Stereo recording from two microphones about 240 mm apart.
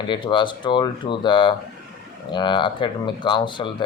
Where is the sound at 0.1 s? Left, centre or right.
Centre.